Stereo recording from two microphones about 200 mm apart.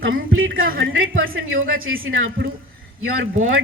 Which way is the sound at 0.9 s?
80° right.